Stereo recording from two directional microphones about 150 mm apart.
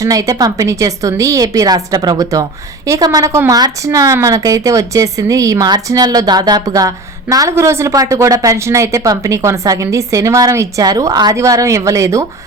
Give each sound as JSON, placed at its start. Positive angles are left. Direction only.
{"t": 0.0, "sound": "a woman's voice", "side_deg": -20}